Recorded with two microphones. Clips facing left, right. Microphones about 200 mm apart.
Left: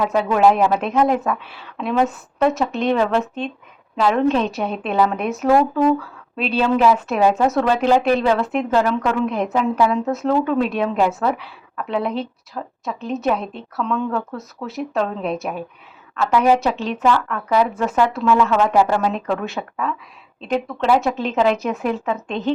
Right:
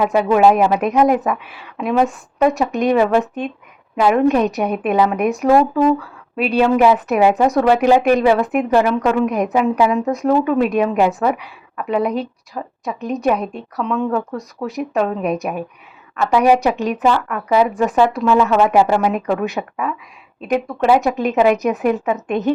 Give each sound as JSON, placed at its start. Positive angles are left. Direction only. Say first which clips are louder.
{"t": 0.0, "sound": "a woman's voice", "louder": "right 3 dB", "side_deg": -5}
{"t": 13.4, "sound": "a woman's voice", "louder": "right 4 dB", "side_deg": -40}
{"t": 13.7, "sound": "a woman's voice", "louder": "right 3 dB", "side_deg": -10}